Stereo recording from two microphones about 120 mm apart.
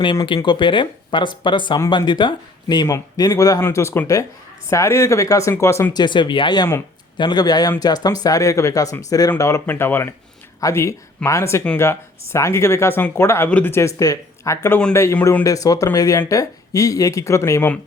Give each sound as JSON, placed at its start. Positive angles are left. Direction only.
{"t": 0.3, "sound": "speech", "side_deg": 40}
{"t": 5.9, "sound": "speech", "side_deg": 40}
{"t": 9.6, "sound": "speech", "side_deg": 20}